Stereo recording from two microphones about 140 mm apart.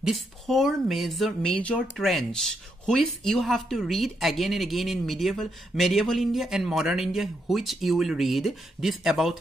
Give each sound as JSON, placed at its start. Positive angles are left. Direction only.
{"t": 0.0, "sound": "speech", "side_deg": 0}